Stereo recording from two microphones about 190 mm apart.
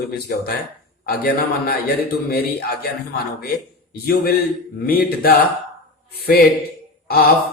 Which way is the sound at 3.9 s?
55° left (ahead or behind).